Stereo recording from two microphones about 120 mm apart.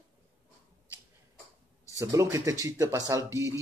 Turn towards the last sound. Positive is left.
turn(degrees=-20)  # may be behind; listen again after turning